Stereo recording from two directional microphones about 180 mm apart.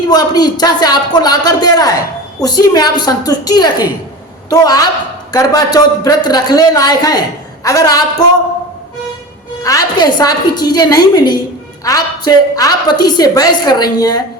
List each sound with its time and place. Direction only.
0.1 s a woman's voice: 20° left (ahead or behind)
9.6 s speech: 20° left (ahead or behind)